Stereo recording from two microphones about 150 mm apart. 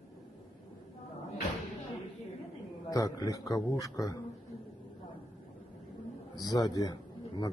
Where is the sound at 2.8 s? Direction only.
25° left (ahead or behind).